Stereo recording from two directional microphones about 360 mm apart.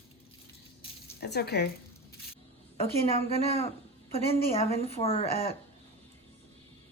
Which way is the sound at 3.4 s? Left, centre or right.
Centre.